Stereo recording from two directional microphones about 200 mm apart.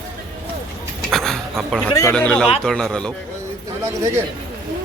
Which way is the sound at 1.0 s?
Centre (ahead or behind).